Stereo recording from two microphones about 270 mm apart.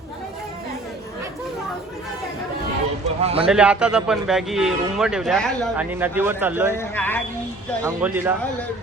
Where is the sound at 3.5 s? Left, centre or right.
Centre.